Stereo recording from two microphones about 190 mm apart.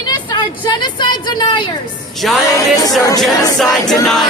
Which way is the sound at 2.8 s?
20° left (ahead or behind).